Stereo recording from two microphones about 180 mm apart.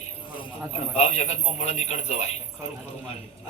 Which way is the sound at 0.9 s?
35° left (ahead or behind).